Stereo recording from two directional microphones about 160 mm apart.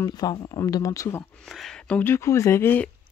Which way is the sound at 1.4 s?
Centre (ahead or behind).